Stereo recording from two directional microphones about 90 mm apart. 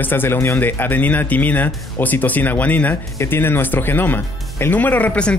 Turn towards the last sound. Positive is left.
turn(degrees=15)  # may be behind; listen again after turning